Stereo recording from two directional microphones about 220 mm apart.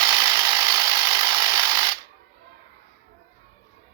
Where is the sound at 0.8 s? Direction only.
20° right (ahead or behind).